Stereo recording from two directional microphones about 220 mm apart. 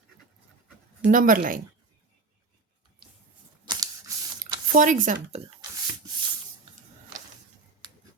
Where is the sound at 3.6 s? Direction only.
15° right (ahead or behind).